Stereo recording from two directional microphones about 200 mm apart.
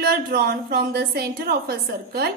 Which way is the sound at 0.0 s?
50° right (ahead or behind).